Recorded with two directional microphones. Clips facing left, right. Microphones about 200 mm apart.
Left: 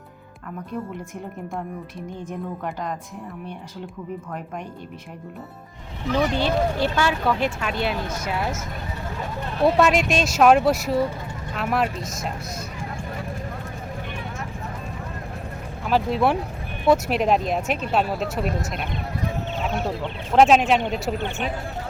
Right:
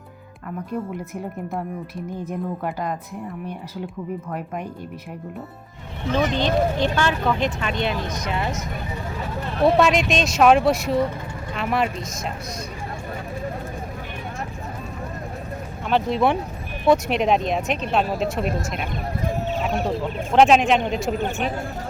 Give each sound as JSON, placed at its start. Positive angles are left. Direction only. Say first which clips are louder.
{"t": 6.3, "sound": "speech", "louder": "right 1 dB", "side_deg": 10}
{"t": 9.6, "sound": "speech", "louder": "right 1 dB", "side_deg": 0}
{"t": 15.9, "sound": "speech", "louder": "right 1 dB", "side_deg": 5}
{"t": 21.2, "sound": "speech", "louder": "right 3 dB", "side_deg": -40}